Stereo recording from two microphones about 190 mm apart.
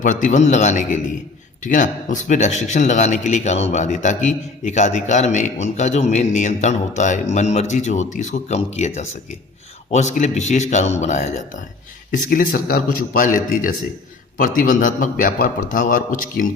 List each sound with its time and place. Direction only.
0.0 s speech: 40° left (ahead or behind)
9.9 s a man's voice: 40° left (ahead or behind)